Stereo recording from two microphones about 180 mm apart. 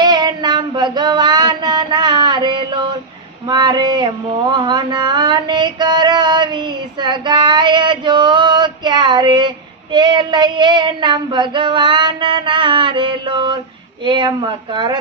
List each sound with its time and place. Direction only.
0.0 s female singing: 25° right (ahead or behind)
3.4 s speech: 25° right (ahead or behind)
4.5 s a sound: 25° right (ahead or behind)